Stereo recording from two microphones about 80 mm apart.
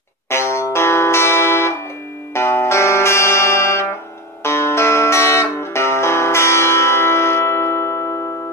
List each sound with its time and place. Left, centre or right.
0.3 s music: left